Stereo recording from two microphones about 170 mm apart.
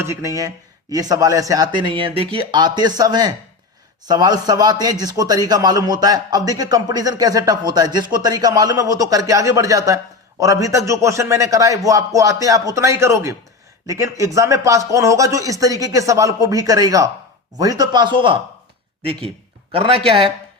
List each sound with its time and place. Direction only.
0.0 s speech: 20° right (ahead or behind)
19.7 s speech: 35° right (ahead or behind)